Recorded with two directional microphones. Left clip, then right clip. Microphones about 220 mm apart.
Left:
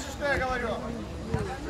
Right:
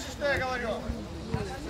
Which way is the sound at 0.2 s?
30° right (ahead or behind).